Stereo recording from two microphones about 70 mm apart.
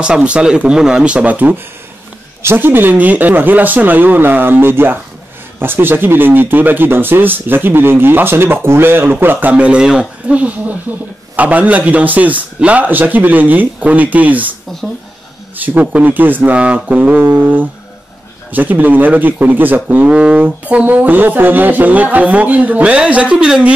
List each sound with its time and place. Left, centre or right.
0.0 s speech: centre
15.5 s speech: right